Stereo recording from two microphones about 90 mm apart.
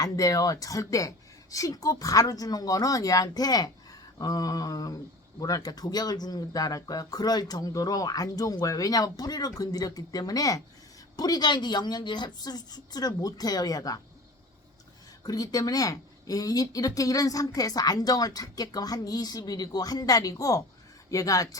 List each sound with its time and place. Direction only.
0.0 s speech: 40° left (ahead or behind)
15.2 s speech: 45° left (ahead or behind)